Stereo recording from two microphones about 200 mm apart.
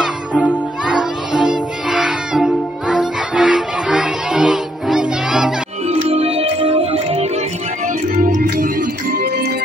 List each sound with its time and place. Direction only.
0.8 s music: 5° right (ahead or behind)
5.9 s music: 30° right (ahead or behind)
8.2 s music: 40° right (ahead or behind)